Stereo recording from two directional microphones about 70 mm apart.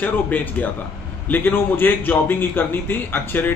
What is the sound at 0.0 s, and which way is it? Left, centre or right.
A man's voice, left.